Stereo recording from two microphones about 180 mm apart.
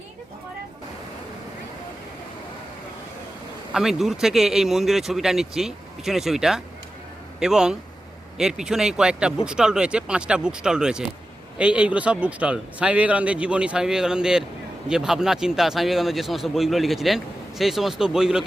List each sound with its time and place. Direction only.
3.7 s speech: centre (ahead or behind)